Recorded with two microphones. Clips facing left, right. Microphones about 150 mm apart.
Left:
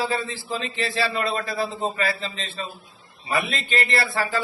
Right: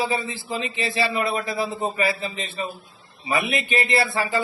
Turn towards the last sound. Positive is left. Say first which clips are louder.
# right 2 dB
turn(degrees=-15)  # may be behind; listen again after turning